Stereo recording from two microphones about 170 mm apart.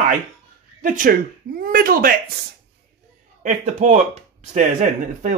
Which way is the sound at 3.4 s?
45° right (ahead or behind).